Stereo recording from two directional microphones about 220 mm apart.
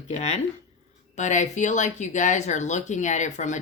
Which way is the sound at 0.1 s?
30° left (ahead or behind).